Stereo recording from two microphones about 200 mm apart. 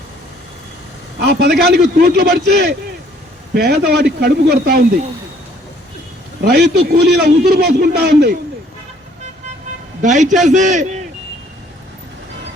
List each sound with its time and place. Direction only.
1.2 s a man's voice: 55° right (ahead or behind)
6.4 s a man's voice: 55° right (ahead or behind)
10.0 s a man's voice: 40° right (ahead or behind)